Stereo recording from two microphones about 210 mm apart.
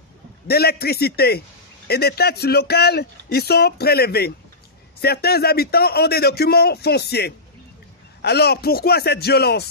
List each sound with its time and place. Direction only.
0.5 s speech: 50° left (ahead or behind)